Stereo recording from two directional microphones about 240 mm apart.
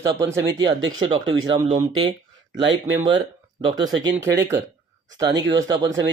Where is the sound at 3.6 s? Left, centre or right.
Centre.